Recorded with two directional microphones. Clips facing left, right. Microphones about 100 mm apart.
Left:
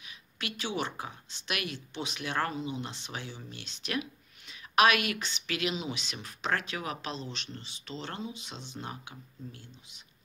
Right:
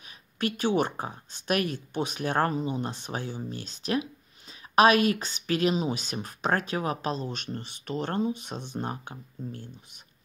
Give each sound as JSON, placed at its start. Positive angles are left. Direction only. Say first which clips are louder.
{"t": 0.0, "sound": "speech", "louder": "right 10 dB", "side_deg": -45}